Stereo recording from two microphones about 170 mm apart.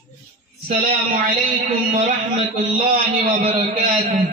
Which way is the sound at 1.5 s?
45° right (ahead or behind).